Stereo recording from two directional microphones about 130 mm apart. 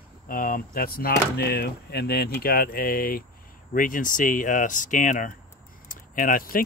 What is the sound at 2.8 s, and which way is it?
Speech, 90° left.